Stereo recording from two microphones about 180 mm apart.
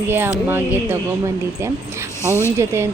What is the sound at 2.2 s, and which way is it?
Speech, 15° left (ahead or behind).